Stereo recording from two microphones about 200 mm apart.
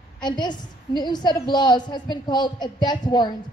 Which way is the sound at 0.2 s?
20° left (ahead or behind).